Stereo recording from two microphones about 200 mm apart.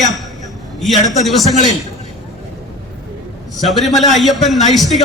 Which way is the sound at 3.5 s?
Centre (ahead or behind).